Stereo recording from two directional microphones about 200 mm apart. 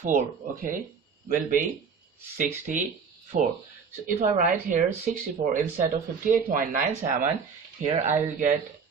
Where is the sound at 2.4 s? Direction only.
40° right (ahead or behind).